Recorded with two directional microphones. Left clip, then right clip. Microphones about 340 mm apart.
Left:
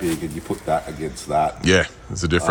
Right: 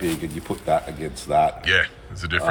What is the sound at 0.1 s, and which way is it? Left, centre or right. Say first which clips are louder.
Speech: left 2 dB; centre.